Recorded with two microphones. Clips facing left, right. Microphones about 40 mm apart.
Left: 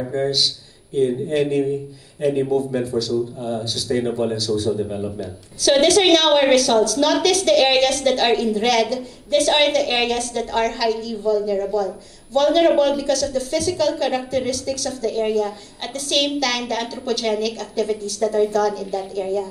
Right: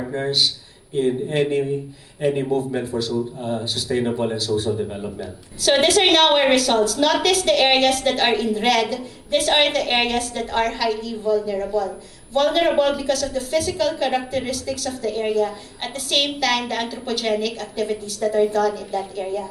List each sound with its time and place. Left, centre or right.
0.1 s speech: centre